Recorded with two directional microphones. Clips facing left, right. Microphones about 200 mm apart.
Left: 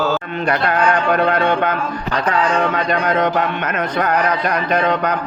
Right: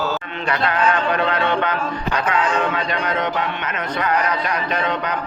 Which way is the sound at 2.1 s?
35° left (ahead or behind).